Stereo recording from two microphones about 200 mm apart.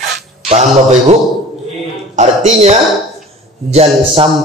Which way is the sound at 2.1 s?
35° right (ahead or behind).